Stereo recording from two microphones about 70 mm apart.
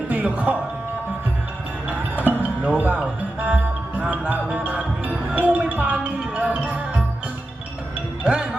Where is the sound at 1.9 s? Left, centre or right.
Right.